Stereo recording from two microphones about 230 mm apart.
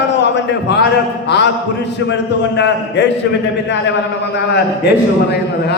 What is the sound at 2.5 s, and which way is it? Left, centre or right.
Speech, left.